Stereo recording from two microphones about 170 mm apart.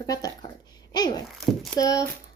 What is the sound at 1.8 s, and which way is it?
Speech, 20° left (ahead or behind).